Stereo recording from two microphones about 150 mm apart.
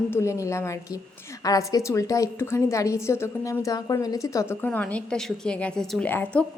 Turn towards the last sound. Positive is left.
turn(degrees=10)  # may be behind; listen again after turning